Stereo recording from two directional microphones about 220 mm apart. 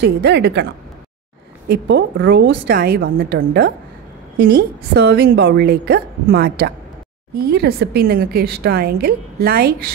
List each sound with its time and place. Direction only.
0.0 s a woman's voice: 50° right (ahead or behind)
1.7 s a woman's voice: 50° right (ahead or behind)